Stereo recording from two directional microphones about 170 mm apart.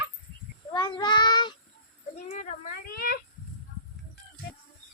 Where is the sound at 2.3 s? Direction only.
50° left (ahead or behind).